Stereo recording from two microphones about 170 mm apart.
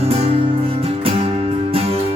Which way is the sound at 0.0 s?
35° right (ahead or behind).